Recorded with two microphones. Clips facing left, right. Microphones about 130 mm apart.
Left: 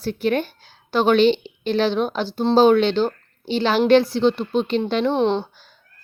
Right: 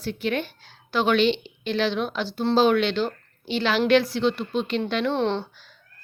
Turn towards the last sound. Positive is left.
turn(degrees=15)  # may be behind; listen again after turning